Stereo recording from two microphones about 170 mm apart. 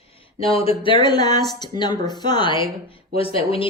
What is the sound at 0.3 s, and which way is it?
A woman's voice, 35° left (ahead or behind).